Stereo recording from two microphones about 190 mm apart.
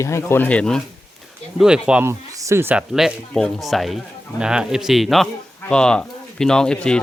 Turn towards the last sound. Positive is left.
turn(degrees=5)  # may be behind; listen again after turning